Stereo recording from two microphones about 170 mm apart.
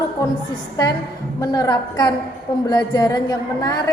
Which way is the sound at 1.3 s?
20° left (ahead or behind).